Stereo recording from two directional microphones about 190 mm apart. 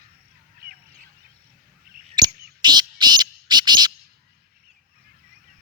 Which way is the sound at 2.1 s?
20° right (ahead or behind).